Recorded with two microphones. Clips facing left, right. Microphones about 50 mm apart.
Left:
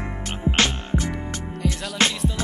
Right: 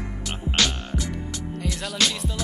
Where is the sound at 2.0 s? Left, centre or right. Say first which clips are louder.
Left 3 dB; left.